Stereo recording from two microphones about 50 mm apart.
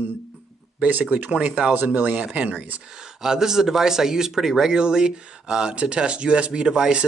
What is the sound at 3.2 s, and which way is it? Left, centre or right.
A man's voice, centre.